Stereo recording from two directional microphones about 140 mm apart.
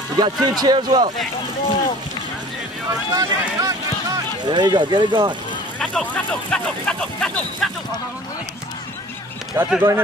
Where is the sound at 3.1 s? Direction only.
25° right (ahead or behind).